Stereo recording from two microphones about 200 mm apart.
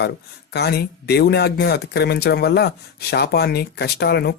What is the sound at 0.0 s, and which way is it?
Speech, 55° left (ahead or behind).